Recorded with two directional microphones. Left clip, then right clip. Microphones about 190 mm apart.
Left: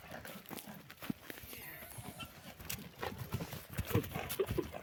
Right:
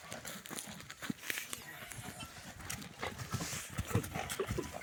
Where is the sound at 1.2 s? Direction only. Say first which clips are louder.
Right 10 dB; 20° left (ahead or behind).